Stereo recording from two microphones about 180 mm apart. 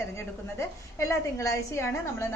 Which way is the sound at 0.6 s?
15° left (ahead or behind).